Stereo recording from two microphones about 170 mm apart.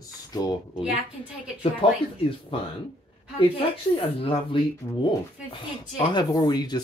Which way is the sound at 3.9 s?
30° left (ahead or behind).